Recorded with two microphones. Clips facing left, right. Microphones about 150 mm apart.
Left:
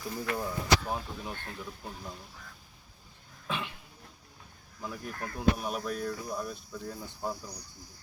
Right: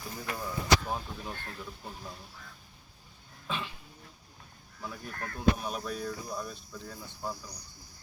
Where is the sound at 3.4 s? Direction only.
15° left (ahead or behind).